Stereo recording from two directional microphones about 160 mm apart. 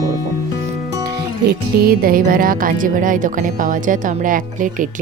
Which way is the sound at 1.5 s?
70° right (ahead or behind).